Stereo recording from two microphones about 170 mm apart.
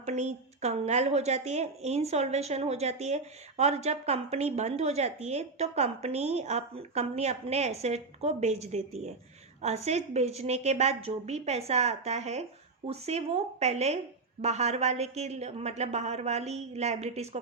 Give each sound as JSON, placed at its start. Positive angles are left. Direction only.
{"t": 0.0, "sound": "a woman's voice", "side_deg": -40}